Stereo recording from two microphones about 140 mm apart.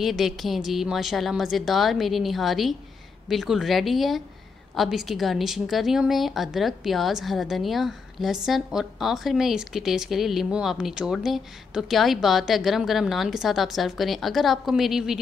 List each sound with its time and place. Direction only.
0.0 s a woman's voice: centre (ahead or behind)